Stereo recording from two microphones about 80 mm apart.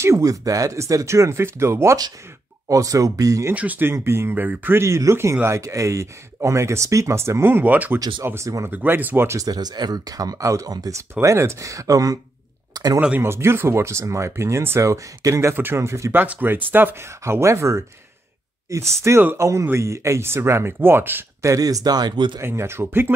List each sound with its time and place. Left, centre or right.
0.0 s speech: right
3.5 s speech: right
3.9 s speech: right
4.8 s speech: right; by 8.0 s centre
8.2 s speech: right
8.6 s speech: right
9.4 s speech: right
11.0 s speech: right
13.2 s speech: right
15.5 s speech: right
16.2 s speech: right
17.2 s speech: right
21.4 s speech: right
22.4 s speech: right